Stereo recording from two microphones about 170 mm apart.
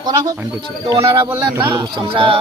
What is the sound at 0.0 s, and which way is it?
Speech, 25° right (ahead or behind).